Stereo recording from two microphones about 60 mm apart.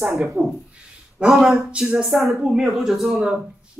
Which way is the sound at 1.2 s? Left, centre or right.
Centre.